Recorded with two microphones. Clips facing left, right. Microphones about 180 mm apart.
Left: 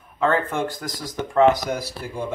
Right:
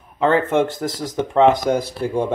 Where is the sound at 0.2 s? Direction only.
25° right (ahead or behind).